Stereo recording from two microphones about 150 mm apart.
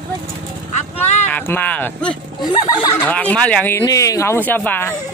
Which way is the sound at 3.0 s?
10° left (ahead or behind).